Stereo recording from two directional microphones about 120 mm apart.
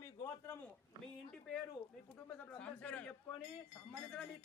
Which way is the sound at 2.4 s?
10° left (ahead or behind).